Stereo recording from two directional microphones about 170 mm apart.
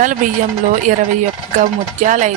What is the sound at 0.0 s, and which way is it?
Speech, 50° right (ahead or behind).